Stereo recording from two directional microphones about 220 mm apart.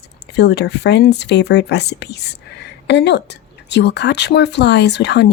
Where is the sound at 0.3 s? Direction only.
50° left (ahead or behind).